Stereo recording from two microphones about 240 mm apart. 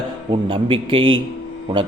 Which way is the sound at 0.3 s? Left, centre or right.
Right.